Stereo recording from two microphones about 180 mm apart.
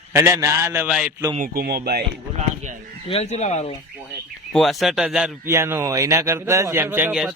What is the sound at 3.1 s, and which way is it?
Speech, 35° left (ahead or behind).